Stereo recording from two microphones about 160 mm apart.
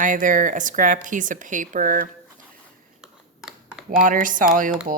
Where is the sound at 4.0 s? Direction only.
55° right (ahead or behind).